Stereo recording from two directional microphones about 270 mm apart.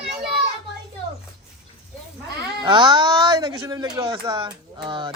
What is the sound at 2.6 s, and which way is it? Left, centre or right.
Speech, centre.